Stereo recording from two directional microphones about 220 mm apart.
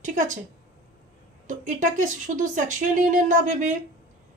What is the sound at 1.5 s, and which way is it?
Speech, 35° right (ahead or behind).